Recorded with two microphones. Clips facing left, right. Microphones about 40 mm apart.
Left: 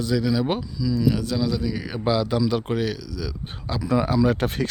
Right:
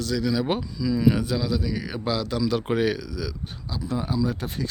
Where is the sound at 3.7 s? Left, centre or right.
Left.